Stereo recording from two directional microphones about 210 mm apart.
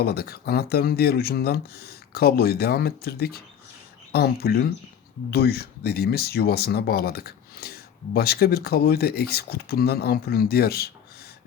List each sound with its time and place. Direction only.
0.0 s speech: 50° left (ahead or behind)